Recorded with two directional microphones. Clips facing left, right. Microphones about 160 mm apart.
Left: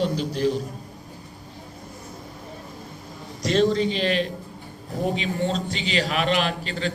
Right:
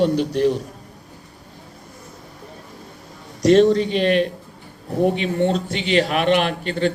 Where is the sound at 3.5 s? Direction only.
60° right (ahead or behind).